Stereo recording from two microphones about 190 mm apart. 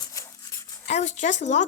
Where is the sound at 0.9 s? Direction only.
40° left (ahead or behind).